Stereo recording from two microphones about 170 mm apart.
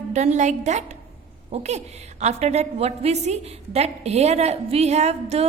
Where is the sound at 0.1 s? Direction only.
45° right (ahead or behind).